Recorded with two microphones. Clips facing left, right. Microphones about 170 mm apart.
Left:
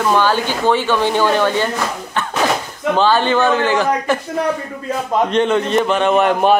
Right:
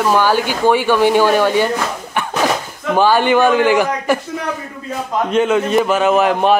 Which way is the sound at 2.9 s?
10° right (ahead or behind).